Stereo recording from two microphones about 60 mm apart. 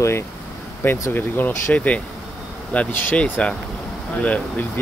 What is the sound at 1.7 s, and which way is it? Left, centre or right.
Speech, left.